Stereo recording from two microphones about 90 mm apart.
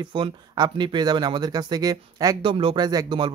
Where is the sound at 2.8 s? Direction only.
50° right (ahead or behind).